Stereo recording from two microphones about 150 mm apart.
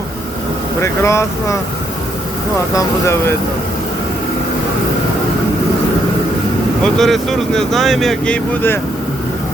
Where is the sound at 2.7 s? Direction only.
20° left (ahead or behind).